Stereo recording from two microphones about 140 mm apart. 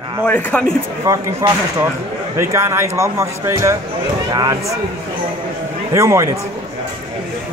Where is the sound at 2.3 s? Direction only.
20° right (ahead or behind).